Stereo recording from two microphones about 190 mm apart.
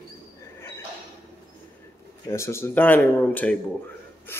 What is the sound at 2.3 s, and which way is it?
Speech, 15° left (ahead or behind).